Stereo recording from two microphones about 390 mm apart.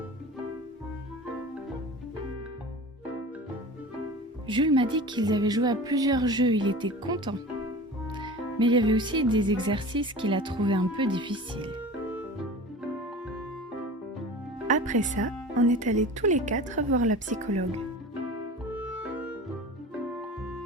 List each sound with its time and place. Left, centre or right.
4.4 s music: centre
14.7 s speech: centre
18.7 s music: centre